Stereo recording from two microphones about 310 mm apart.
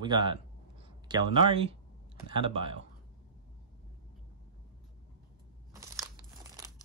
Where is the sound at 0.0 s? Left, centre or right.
Centre.